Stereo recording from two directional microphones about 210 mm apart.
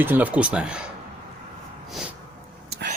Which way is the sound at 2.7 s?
50° right (ahead or behind).